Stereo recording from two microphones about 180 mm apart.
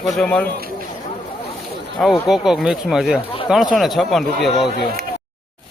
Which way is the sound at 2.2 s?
5° right (ahead or behind).